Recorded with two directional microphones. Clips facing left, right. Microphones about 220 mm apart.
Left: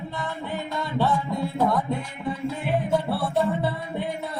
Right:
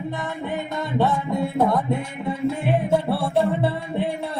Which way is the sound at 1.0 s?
25° right (ahead or behind).